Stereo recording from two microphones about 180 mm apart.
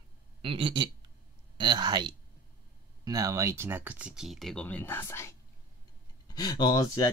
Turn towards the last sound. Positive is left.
turn(degrees=20)  # may be behind; listen again after turning